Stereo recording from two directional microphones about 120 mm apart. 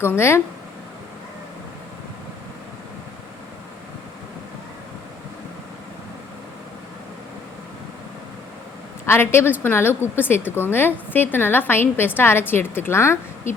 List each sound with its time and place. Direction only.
0.0 s a woman's voice: 20° left (ahead or behind)
9.0 s a woman's voice: 20° left (ahead or behind)